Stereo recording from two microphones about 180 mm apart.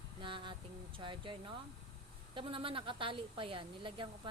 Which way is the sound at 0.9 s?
25° right (ahead or behind).